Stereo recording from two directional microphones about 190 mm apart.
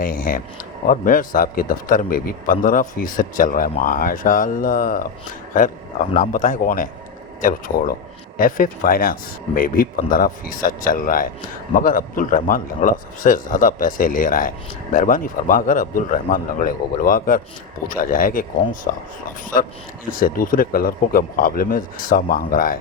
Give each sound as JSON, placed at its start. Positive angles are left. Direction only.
{"t": 0.0, "sound": "a man's voice", "side_deg": 50}
{"t": 20.1, "sound": "a man's voice", "side_deg": 45}